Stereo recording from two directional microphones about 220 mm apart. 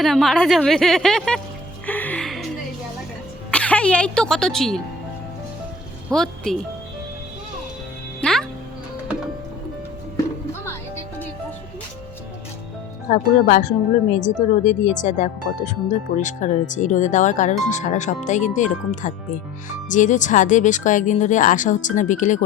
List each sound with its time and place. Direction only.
0.0 s a woman's voice: centre (ahead or behind)
1.9 s music: 10° left (ahead or behind)
3.5 s speech: 5° left (ahead or behind)
6.1 s a woman's voice: centre (ahead or behind)
8.2 s music: 5° left (ahead or behind)
13.1 s speech: 35° left (ahead or behind)